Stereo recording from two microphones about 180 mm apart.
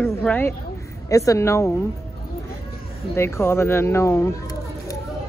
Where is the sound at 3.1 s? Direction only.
15° left (ahead or behind).